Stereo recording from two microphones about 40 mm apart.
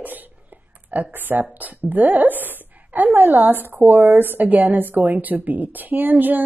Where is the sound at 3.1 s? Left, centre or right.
Right.